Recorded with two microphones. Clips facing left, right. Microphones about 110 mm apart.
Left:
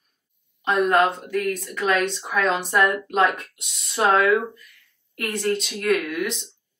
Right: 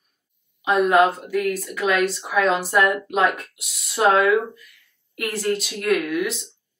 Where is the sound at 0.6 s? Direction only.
5° right (ahead or behind).